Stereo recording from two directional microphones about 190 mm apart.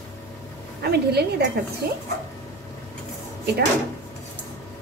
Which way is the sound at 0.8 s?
55° right (ahead or behind).